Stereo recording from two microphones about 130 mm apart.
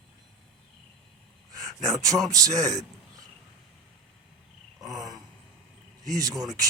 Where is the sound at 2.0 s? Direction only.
25° right (ahead or behind).